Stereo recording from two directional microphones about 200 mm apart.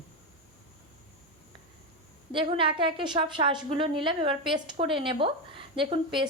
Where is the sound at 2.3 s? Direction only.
25° right (ahead or behind).